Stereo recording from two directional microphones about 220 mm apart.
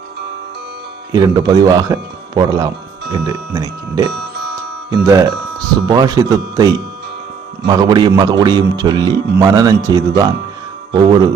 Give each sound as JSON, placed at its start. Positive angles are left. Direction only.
{"t": 1.1, "sound": "speech", "side_deg": -15}